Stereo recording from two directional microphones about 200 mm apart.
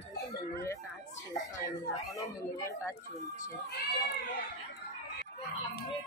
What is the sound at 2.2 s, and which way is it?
Speech, 15° left (ahead or behind).